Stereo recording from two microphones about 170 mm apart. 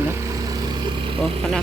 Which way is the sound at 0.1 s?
20° right (ahead or behind).